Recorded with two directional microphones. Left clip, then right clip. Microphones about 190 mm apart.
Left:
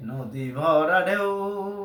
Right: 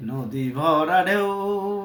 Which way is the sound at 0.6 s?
10° left (ahead or behind).